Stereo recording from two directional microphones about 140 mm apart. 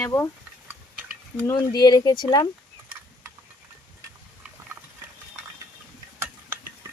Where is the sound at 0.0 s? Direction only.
20° left (ahead or behind).